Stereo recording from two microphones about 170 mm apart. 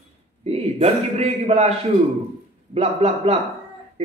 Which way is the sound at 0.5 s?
40° right (ahead or behind).